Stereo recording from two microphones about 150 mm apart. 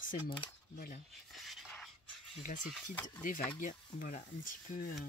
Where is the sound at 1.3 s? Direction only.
Centre (ahead or behind).